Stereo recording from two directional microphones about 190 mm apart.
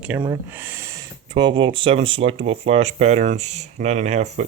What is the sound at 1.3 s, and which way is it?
Speech, 25° right (ahead or behind).